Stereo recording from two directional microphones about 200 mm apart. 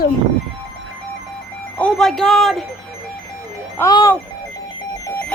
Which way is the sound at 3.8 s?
15° left (ahead or behind).